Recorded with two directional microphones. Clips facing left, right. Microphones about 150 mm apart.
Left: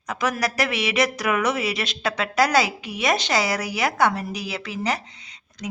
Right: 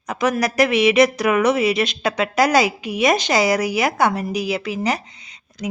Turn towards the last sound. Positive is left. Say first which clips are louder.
# right 6 dB
turn(degrees=-10)  # may be behind; listen again after turning